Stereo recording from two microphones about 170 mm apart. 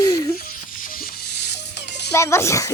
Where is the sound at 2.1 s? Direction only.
15° left (ahead or behind).